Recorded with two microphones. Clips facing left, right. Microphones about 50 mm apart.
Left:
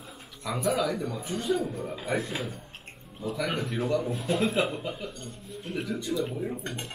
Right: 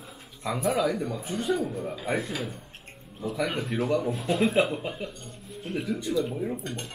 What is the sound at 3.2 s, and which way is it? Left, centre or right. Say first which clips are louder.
Speech: right 1 dB; centre.